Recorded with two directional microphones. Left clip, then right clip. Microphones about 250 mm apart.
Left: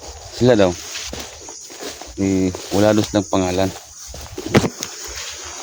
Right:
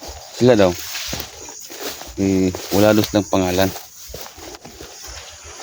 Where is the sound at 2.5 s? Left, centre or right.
Right.